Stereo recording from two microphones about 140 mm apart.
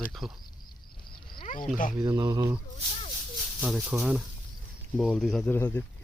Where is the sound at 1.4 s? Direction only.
75° left (ahead or behind).